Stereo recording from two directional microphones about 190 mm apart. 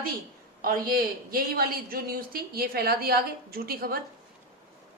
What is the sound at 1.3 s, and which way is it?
Speech, 50° right (ahead or behind).